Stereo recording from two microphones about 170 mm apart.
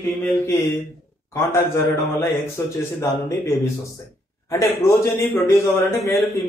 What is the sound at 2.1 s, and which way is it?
A man's voice, 15° left (ahead or behind).